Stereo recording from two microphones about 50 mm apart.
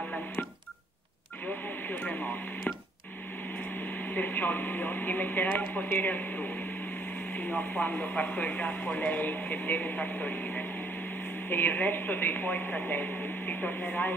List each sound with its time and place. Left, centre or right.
4.1 s speech: left